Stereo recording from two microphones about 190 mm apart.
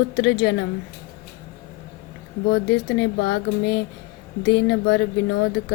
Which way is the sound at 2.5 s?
65° left (ahead or behind).